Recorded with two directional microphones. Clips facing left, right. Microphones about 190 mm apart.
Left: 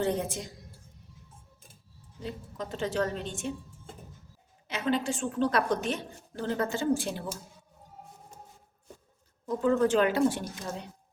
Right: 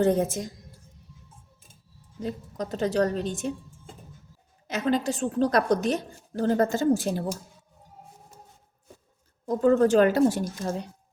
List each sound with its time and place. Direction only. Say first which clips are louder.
0.0 s speech: right 7 dB; 45° right (ahead or behind)
2.2 s a woman's voice: right 5 dB; 40° right (ahead or behind)
4.7 s a woman's voice: right 4 dB; 40° right (ahead or behind)
9.5 s speech: right 5 dB; 45° right (ahead or behind)